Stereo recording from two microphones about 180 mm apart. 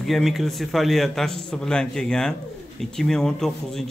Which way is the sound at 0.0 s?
Centre (ahead or behind).